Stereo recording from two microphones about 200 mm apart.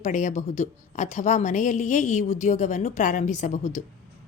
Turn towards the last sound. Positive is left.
turn(degrees=40)  # may be behind; listen again after turning